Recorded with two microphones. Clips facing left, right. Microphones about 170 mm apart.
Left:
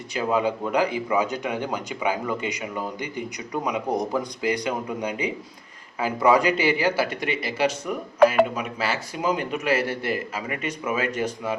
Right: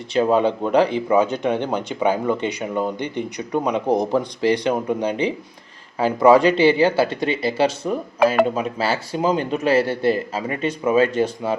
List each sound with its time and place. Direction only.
0.1 s speech: 30° right (ahead or behind)